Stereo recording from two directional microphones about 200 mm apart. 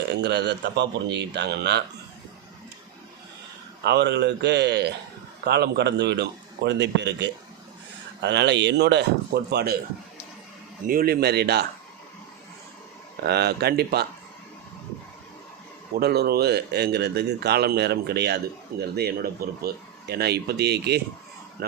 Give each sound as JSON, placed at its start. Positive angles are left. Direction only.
{"t": 0.2, "sound": "speech", "side_deg": -55}
{"t": 3.8, "sound": "speech", "side_deg": -55}
{"t": 10.8, "sound": "speech", "side_deg": -50}
{"t": 13.2, "sound": "speech", "side_deg": -55}
{"t": 16.0, "sound": "speech", "side_deg": -55}